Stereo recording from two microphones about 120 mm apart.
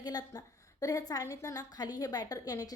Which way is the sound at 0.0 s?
35° left (ahead or behind).